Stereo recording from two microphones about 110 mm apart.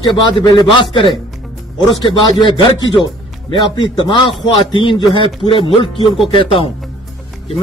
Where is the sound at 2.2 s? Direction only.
45° left (ahead or behind).